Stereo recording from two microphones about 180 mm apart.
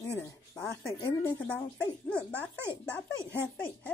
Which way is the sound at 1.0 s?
15° left (ahead or behind).